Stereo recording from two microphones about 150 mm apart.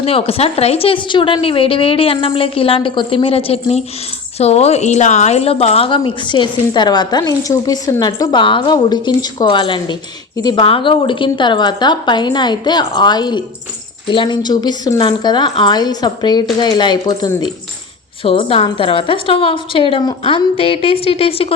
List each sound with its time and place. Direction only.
0.0 s a woman's voice: 40° left (ahead or behind)
18.2 s a woman's voice: 40° left (ahead or behind)